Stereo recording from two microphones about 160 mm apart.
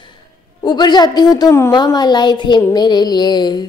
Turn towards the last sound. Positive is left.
turn(degrees=25)  # may be behind; listen again after turning